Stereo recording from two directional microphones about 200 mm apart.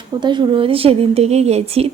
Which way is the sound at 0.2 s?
25° right (ahead or behind).